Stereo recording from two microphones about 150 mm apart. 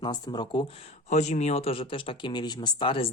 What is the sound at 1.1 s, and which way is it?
Speech, 50° left (ahead or behind).